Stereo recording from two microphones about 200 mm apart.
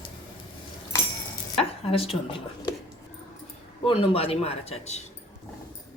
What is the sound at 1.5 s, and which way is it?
A woman's voice, 30° left (ahead or behind).